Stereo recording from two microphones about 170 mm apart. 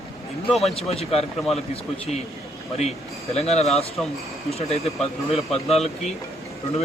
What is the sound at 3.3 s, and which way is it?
Speech, 40° left (ahead or behind).